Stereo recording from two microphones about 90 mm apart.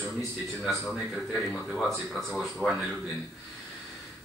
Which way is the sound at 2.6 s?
20° left (ahead or behind).